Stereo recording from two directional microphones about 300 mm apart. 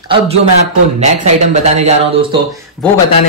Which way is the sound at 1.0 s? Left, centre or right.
Right.